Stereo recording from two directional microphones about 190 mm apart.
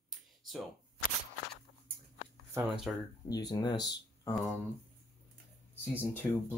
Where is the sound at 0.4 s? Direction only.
Centre (ahead or behind).